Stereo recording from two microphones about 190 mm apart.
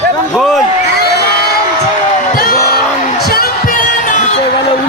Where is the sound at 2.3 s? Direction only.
45° left (ahead or behind).